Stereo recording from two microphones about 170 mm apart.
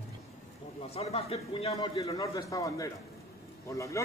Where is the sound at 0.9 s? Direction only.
35° left (ahead or behind).